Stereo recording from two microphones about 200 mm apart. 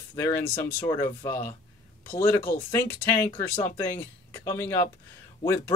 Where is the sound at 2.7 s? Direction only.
10° left (ahead or behind).